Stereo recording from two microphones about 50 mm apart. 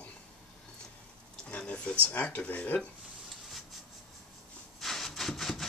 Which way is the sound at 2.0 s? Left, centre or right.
Left.